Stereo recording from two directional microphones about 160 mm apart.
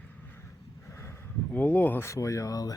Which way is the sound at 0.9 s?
15° left (ahead or behind).